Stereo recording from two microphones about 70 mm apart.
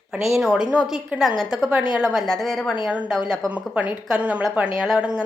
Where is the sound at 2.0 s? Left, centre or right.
Centre.